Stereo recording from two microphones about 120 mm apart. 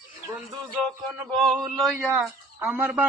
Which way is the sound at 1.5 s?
Centre (ahead or behind).